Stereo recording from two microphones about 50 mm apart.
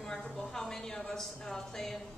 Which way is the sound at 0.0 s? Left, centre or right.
Centre.